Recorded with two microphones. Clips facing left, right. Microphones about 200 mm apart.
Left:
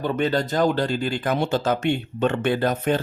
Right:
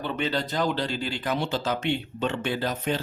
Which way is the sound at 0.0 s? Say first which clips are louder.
Left 6 dB; 45° left (ahead or behind).